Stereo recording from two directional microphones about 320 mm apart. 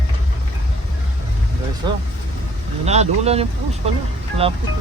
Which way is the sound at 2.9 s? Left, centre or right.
Centre.